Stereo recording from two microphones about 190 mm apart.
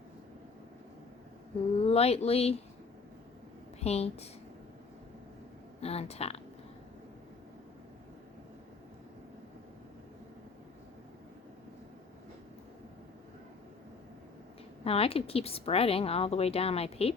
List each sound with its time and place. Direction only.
1.8 s speech: 30° left (ahead or behind)
3.8 s a woman's voice: 35° left (ahead or behind)
5.8 s a woman's voice: 30° left (ahead or behind)
14.8 s a woman's voice: 30° left (ahead or behind)